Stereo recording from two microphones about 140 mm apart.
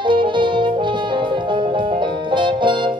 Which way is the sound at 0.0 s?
35° right (ahead or behind).